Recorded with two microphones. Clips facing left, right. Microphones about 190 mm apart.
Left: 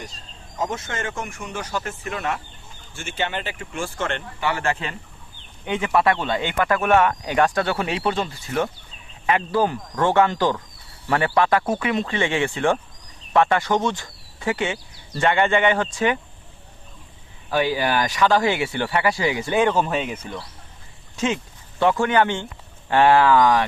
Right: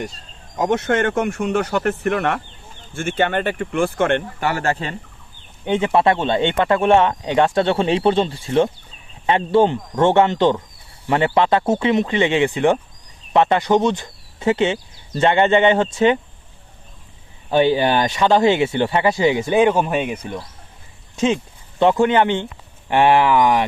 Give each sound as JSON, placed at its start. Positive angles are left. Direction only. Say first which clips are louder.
{"t": 0.5, "sound": "speech", "louder": "right 9 dB", "side_deg": -65}
{"t": 17.5, "sound": "speech", "louder": "right 6 dB", "side_deg": -25}